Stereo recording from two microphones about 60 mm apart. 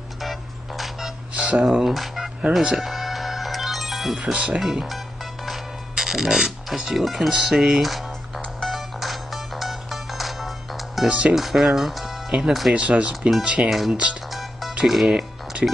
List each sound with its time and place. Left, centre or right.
0.2 s music: centre
1.3 s speech: centre
2.8 s music: centre
4.2 s speech: centre
4.6 s music: centre
7.7 s speech: centre
8.5 s music: centre
11.1 s speech: right
11.3 s speech: centre
12.7 s speech: right
13.7 s speech: centre
14.3 s music: centre
14.9 s speech: centre